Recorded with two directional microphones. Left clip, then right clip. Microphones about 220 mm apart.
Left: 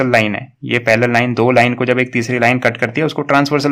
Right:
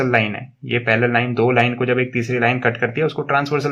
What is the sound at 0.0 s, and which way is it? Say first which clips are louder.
Speech: left 4 dB; 35° left (ahead or behind).